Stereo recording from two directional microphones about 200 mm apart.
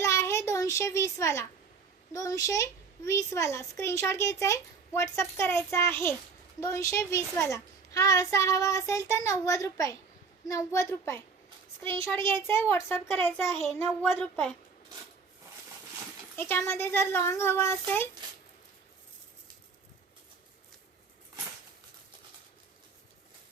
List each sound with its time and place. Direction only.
0.0 s child singing: 15° left (ahead or behind)
2.1 s a child's voice: 15° left (ahead or behind)
16.3 s a child's voice: 10° left (ahead or behind)